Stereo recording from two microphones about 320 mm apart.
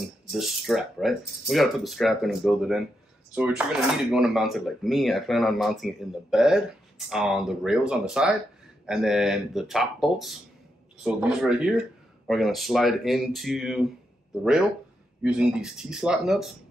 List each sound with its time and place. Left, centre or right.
0.3 s speech: centre
15.2 s speech: centre